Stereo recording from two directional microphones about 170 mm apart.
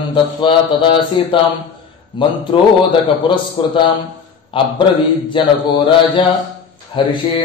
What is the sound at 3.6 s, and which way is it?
Speech, 30° left (ahead or behind).